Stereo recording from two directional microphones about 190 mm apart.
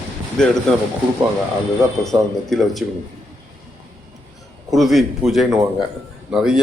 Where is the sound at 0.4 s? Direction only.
5° left (ahead or behind).